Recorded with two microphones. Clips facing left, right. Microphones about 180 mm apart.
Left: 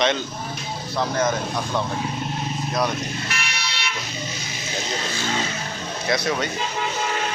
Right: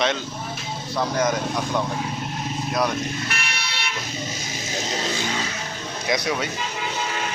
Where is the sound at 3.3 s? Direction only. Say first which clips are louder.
Even; 55° right (ahead or behind).